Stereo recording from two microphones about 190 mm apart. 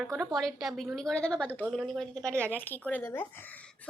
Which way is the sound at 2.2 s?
15° right (ahead or behind).